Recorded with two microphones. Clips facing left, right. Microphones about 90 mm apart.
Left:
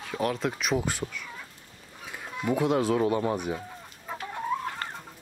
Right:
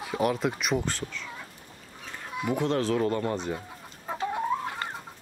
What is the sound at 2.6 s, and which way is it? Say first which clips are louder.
Speech: left 2 dB; 10° left (ahead or behind).